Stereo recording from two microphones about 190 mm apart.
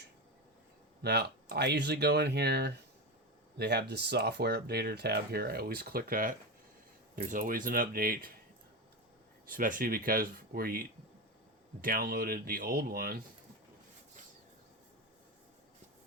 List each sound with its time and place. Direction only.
1.0 s speech: 60° right (ahead or behind)
9.5 s speech: 45° right (ahead or behind)